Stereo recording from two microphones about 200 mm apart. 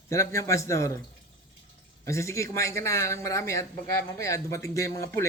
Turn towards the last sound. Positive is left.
turn(degrees=15)  # may be behind; listen again after turning